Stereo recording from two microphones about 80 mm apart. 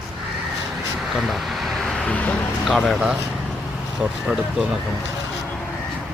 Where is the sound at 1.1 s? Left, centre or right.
Centre.